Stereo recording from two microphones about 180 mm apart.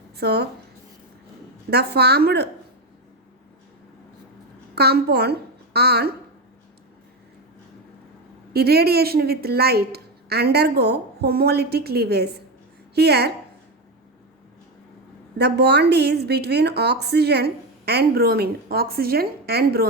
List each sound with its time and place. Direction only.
0.2 s a woman's voice: 65° right (ahead or behind)
1.7 s a woman's voice: 65° right (ahead or behind)
4.7 s a woman's voice: 60° right (ahead or behind)
8.5 s a woman's voice: 60° right (ahead or behind)
15.4 s a woman's voice: 65° right (ahead or behind)